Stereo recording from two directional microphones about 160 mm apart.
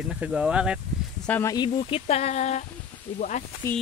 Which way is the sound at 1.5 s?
35° left (ahead or behind).